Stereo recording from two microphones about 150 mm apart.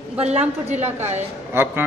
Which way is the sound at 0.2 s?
45° right (ahead or behind).